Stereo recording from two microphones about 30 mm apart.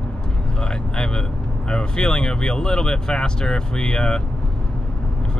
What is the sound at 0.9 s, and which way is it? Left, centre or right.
Speech, left.